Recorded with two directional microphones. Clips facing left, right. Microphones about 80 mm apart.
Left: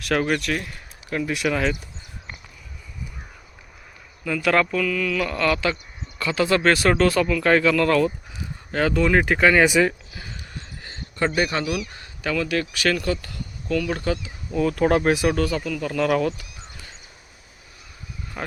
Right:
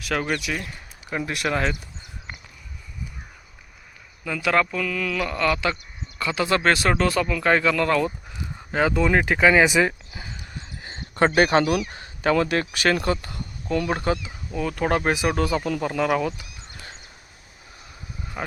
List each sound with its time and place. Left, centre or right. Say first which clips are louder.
0.0 s speech: left 3 dB; centre
4.4 s speech: left 2 dB; centre
4.9 s a sound: left 3 dB; right
5.2 s speech: right 1 dB; right
11.3 s speech: right 5 dB; right
11.9 s speech: right 5 dB; right
14.5 s speech: left 4 dB; centre
18.4 s speech: even; centre